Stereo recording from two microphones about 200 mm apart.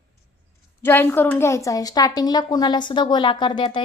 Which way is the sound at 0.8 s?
10° left (ahead or behind).